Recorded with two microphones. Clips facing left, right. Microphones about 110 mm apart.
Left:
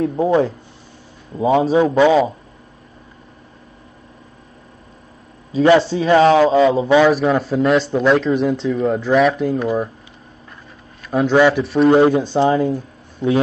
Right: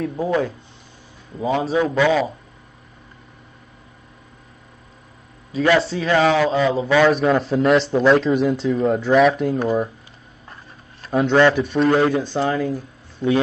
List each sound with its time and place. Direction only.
0.0 s a man's voice: 25° left (ahead or behind)
5.5 s a man's voice: 30° left (ahead or behind)
7.0 s speech: 5° left (ahead or behind)
11.1 s speech: 5° left (ahead or behind)
11.9 s a man's voice: 20° left (ahead or behind)